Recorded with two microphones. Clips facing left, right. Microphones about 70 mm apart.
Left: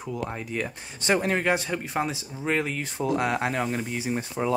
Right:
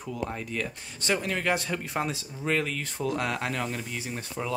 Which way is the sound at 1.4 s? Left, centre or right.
Centre.